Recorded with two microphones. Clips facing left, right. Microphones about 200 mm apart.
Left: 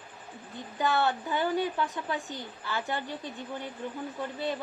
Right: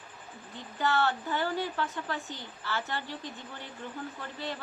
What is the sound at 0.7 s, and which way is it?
Speech, 15° left (ahead or behind).